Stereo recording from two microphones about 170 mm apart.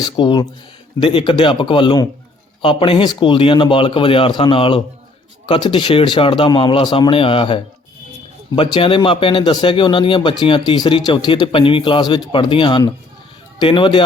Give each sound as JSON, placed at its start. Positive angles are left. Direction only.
{"t": 0.0, "sound": "a man's voice", "side_deg": 25}